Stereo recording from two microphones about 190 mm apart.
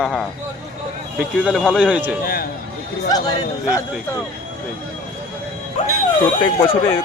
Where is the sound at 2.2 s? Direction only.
50° left (ahead or behind).